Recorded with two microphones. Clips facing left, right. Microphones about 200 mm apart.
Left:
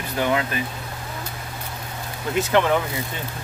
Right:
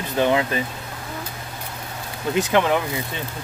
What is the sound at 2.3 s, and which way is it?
Speech, 15° right (ahead or behind).